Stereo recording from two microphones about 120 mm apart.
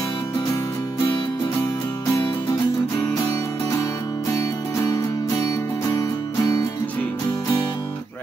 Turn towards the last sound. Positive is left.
turn(degrees=35)  # may be behind; listen again after turning